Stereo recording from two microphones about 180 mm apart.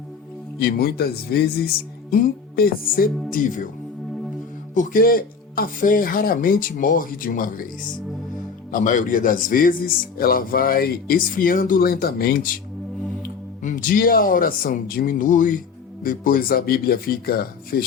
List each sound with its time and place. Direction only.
0.6 s a man's voice: 60° left (ahead or behind)
4.7 s a man's voice: 50° left (ahead or behind)
8.7 s a man's voice: 45° left (ahead or behind)
13.6 s a man's voice: 45° left (ahead or behind)